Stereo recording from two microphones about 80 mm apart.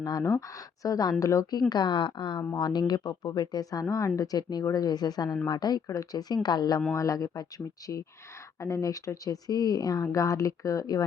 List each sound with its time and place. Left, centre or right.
0.0 s speech: left
1.7 s speech: left
2.6 s speech: left
6.9 s speech: left
8.6 s speech: left